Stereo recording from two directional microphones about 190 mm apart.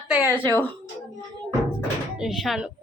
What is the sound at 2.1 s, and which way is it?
Speech, centre (ahead or behind).